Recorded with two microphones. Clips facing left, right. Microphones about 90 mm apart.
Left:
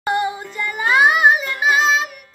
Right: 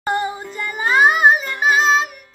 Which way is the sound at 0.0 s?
35° right (ahead or behind).